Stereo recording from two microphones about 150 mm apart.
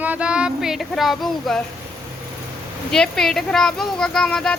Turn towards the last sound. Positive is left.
turn(degrees=5)  # may be behind; listen again after turning